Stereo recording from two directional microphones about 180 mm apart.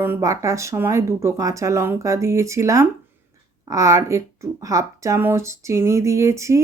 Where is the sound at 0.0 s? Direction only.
15° right (ahead or behind).